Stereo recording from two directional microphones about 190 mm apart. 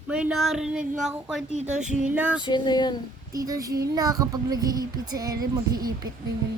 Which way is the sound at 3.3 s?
20° right (ahead or behind).